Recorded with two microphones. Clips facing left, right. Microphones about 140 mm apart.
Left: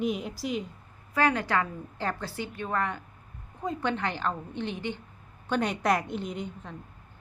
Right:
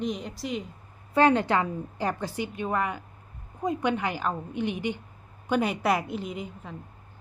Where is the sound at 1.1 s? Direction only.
25° right (ahead or behind); by 6.7 s 5° right (ahead or behind).